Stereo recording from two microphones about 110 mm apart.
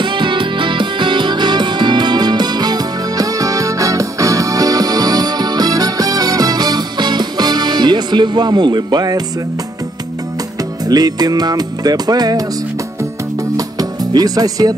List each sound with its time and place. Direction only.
0.0 s music: 45° right (ahead or behind)
10.9 s music: 35° right (ahead or behind)
13.6 s music: 35° right (ahead or behind)